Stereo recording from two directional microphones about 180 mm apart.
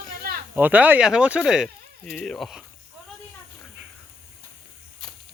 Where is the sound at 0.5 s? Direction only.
10° right (ahead or behind).